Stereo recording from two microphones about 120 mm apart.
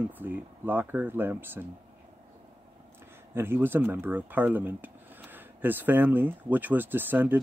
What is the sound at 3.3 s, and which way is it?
Speech, 20° right (ahead or behind).